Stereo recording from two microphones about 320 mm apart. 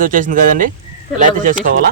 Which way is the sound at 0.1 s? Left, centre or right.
Right.